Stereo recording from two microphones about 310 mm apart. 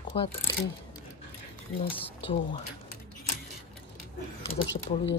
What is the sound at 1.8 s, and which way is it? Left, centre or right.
Speech, centre.